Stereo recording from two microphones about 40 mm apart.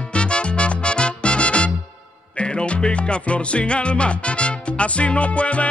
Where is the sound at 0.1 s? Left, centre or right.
Left.